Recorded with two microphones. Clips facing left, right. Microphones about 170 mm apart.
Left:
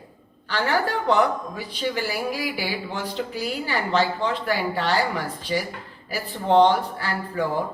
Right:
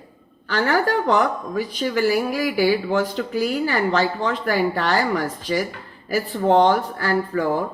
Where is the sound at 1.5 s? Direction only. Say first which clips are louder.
Right 5 dB; 45° right (ahead or behind).